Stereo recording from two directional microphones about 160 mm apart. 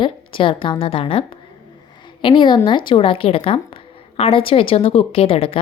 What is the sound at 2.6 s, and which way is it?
A woman's voice, 30° left (ahead or behind).